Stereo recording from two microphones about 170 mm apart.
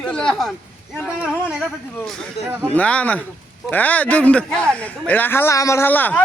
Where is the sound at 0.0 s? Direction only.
5° left (ahead or behind).